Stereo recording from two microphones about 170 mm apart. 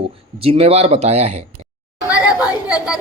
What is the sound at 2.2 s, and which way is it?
Chatter, 5° right (ahead or behind).